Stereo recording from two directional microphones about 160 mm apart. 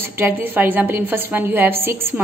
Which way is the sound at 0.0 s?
10° right (ahead or behind).